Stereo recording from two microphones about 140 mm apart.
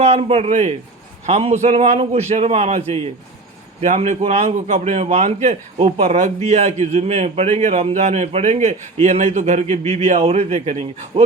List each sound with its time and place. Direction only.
0.0 s a man's voice: 45° right (ahead or behind)